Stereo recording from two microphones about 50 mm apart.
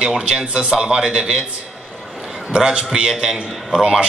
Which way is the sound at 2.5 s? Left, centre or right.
Centre.